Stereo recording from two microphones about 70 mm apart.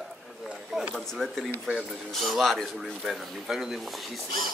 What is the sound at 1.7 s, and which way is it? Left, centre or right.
Speech, centre.